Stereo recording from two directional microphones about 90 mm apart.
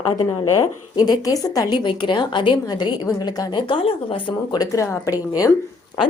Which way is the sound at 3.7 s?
75° left (ahead or behind).